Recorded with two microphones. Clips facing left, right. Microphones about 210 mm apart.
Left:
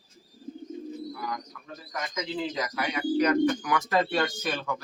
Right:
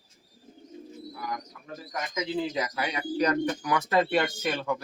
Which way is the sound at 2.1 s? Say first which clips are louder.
Right 2 dB; 25° right (ahead or behind).